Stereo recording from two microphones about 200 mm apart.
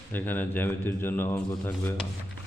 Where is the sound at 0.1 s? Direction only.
10° left (ahead or behind).